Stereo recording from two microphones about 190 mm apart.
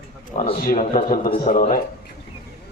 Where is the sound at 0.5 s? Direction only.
45° left (ahead or behind).